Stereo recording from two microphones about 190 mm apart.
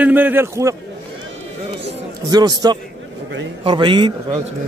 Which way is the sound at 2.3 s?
20° right (ahead or behind).